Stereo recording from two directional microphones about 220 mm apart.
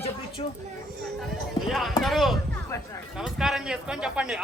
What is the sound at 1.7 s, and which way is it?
Speech, centre (ahead or behind).